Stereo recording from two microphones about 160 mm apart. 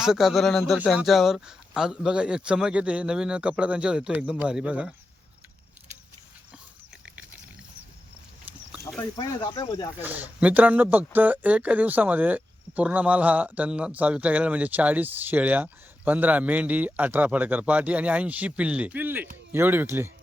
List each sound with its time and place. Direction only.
0.0 s speech: 5° right (ahead or behind)
8.5 s a sound: 10° right (ahead or behind)
9.1 s speech: 25° left (ahead or behind)
10.0 s speech: 10° right (ahead or behind)